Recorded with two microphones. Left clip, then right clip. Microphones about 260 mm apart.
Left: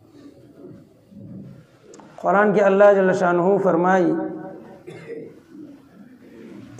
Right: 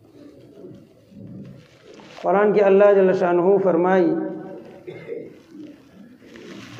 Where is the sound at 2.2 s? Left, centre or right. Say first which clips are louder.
Even; left.